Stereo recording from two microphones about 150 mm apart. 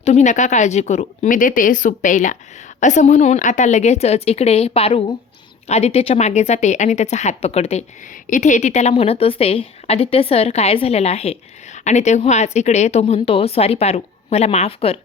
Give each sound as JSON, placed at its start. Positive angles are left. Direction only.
{"t": 0.0, "sound": "a woman's voice", "side_deg": 50}